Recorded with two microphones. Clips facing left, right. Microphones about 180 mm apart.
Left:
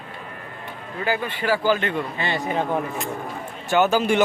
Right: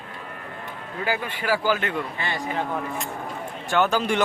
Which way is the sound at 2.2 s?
20° left (ahead or behind).